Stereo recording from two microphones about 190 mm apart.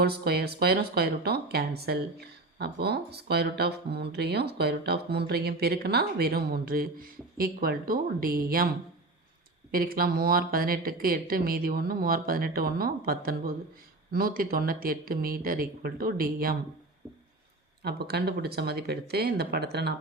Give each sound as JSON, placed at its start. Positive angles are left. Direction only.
{"t": 0.0, "sound": "speech", "side_deg": -55}
{"t": 9.7, "sound": "speech", "side_deg": -50}
{"t": 17.8, "sound": "speech", "side_deg": -55}